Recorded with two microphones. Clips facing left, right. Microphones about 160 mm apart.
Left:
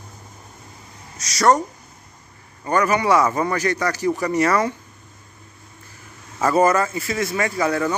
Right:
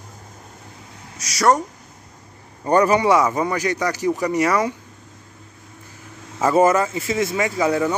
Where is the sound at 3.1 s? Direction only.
15° right (ahead or behind).